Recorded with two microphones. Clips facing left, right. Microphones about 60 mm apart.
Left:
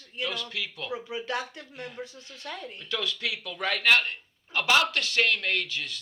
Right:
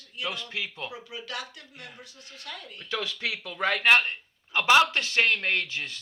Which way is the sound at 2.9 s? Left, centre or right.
Right.